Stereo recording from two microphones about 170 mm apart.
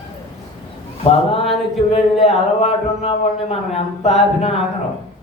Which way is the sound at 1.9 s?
35° left (ahead or behind).